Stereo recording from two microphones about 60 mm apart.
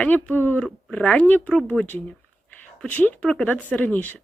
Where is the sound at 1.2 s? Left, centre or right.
Left.